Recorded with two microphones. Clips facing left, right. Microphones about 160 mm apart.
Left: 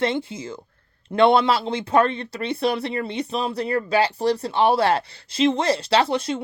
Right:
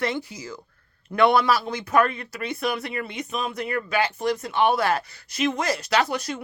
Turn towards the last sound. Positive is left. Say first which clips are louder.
# left 4 dB
turn(degrees=30)  # may be behind; listen again after turning